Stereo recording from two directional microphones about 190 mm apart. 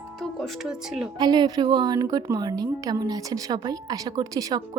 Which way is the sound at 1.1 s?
20° right (ahead or behind).